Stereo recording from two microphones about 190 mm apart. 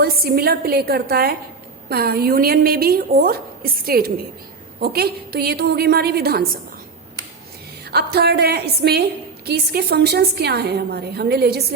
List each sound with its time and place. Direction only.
0.0 s a woman's voice: 55° right (ahead or behind)
7.9 s a woman's voice: 60° right (ahead or behind)